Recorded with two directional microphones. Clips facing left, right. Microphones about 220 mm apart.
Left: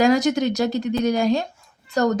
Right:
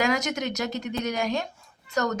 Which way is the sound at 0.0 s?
35° left (ahead or behind).